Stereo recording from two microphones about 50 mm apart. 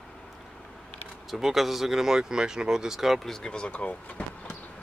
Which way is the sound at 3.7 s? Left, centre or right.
Left.